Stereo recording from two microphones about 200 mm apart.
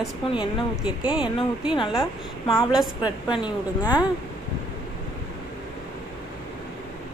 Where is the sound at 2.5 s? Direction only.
5° right (ahead or behind).